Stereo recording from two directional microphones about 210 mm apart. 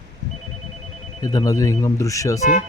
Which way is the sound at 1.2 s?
20° left (ahead or behind).